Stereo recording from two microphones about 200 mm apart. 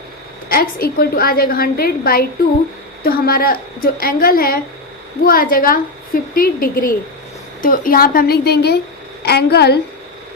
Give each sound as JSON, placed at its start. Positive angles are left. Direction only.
{"t": 0.4, "sound": "a woman's voice", "side_deg": 45}